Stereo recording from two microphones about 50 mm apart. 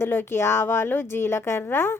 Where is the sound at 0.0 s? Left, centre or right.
Left.